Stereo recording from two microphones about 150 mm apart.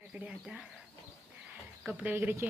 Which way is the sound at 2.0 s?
15° right (ahead or behind).